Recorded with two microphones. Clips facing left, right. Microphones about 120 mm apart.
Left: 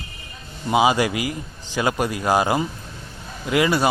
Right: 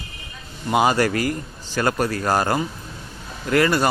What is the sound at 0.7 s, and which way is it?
A man's voice, 10° left (ahead or behind).